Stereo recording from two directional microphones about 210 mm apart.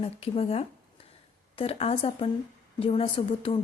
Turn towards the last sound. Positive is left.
turn(degrees=25)  # may be behind; listen again after turning